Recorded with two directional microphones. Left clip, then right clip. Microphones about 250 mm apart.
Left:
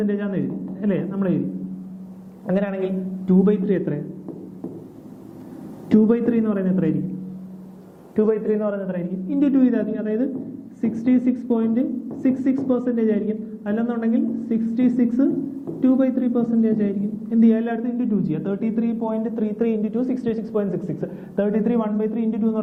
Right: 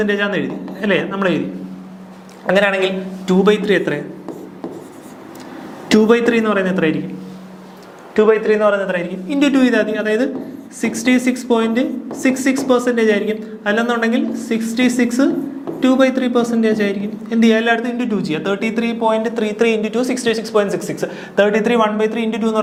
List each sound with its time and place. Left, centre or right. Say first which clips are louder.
0.0 s a man's voice: right 8 dB; centre
2.5 s a man's voice: right 10 dB; centre
5.9 s a man's voice: right 7 dB; centre
8.1 s a man's voice: right 8 dB; centre